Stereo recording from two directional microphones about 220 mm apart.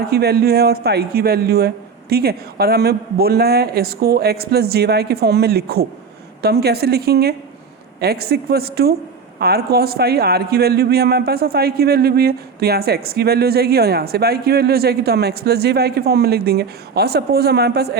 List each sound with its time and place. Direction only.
0.1 s a man's voice: 45° right (ahead or behind)